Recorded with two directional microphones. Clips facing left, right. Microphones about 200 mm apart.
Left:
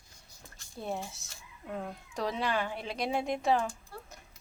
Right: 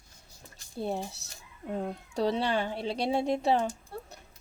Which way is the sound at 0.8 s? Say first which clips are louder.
Right 4 dB; 30° right (ahead or behind).